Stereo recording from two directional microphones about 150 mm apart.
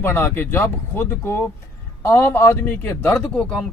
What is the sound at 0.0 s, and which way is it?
A man's voice, 15° left (ahead or behind).